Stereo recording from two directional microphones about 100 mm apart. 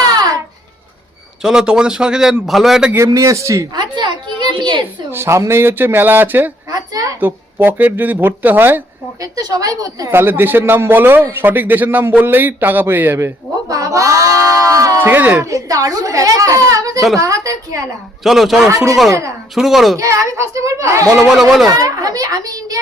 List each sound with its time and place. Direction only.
1.4 s a man's voice: 5° right (ahead or behind)
3.0 s speech: 35° right (ahead or behind)
3.8 s a child's voice: 50° right (ahead or behind)
5.1 s a man's voice: 25° right (ahead or behind)
6.7 s a woman's voice: 35° right (ahead or behind)
7.2 s a man's voice: 20° right (ahead or behind)
9.2 s speech: 35° right (ahead or behind)
10.1 s a man's voice: 20° right (ahead or behind)
15.4 s speech: 35° right (ahead or behind)
18.2 s speech: centre (ahead or behind)
19.5 s speech: 5° right (ahead or behind)
20.0 s speech: 30° right (ahead or behind)
21.2 s speech: centre (ahead or behind)
21.7 s speech: 35° right (ahead or behind)